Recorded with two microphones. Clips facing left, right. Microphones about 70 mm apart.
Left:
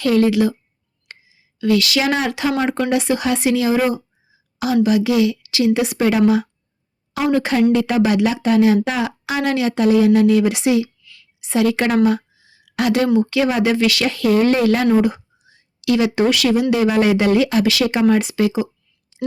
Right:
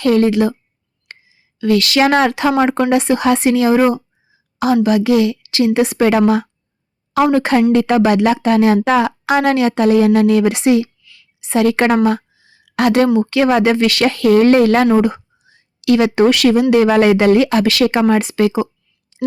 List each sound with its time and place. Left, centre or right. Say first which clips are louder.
0.0 s a woman's voice: right 2 dB; right
1.1 s a sound: right 3 dB; right
1.5 s speech: right 4 dB; right
7.1 s a woman's voice: right 6 dB; right
7.3 s a woman's voice: left 1 dB; right
12.0 s a sound: right 1 dB; right
13.1 s speech: right 4 dB; right